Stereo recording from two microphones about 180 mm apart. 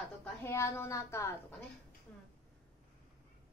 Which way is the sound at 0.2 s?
15° left (ahead or behind).